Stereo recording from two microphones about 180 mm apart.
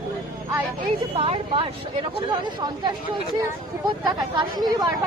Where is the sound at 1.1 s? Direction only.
30° right (ahead or behind).